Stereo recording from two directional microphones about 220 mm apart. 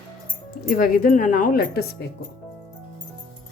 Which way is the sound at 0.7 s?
40° left (ahead or behind).